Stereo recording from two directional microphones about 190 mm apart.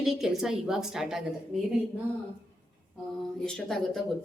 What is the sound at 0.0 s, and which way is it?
A woman's voice, centre (ahead or behind).